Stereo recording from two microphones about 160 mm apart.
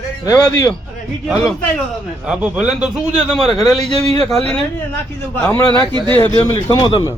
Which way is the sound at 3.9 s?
35° right (ahead or behind).